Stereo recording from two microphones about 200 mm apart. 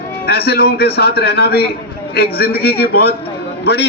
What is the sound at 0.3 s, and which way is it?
A man's voice, 50° left (ahead or behind).